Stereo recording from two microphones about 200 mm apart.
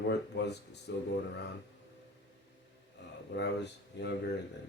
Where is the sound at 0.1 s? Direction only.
55° left (ahead or behind).